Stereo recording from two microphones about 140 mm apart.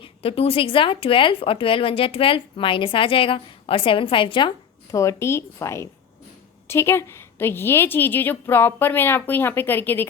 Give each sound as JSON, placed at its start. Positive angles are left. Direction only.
{"t": 0.0, "sound": "a woman's voice", "side_deg": 45}